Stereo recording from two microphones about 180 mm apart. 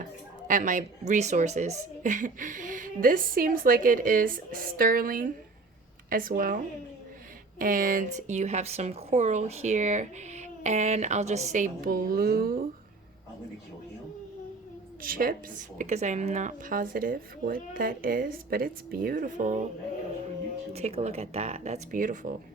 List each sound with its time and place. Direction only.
0.4 s a woman's voice: 45° right (ahead or behind)
7.6 s speech: 50° right (ahead or behind)
15.0 s a woman's voice: 50° right (ahead or behind)
20.7 s speech: 35° right (ahead or behind)